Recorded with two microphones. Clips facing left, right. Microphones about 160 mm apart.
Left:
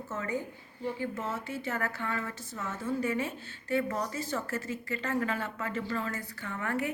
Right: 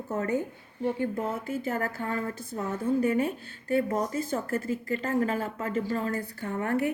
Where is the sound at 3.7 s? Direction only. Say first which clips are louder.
Right 4 dB; 35° right (ahead or behind).